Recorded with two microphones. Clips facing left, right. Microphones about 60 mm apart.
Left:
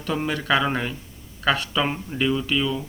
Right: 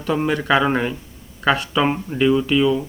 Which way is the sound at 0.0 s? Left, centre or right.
Centre.